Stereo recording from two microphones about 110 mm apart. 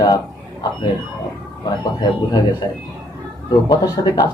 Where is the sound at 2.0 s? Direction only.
40° left (ahead or behind).